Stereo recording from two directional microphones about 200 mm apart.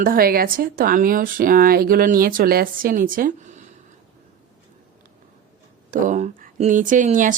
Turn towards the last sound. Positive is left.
turn(degrees=-40)  # may be behind; listen again after turning